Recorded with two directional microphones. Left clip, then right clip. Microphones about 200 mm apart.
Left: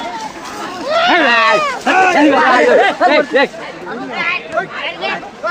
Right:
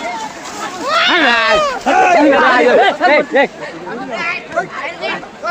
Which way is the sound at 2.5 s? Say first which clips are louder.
Even; 45° right (ahead or behind).